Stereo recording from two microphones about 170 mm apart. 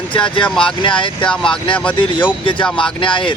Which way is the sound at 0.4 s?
5° left (ahead or behind).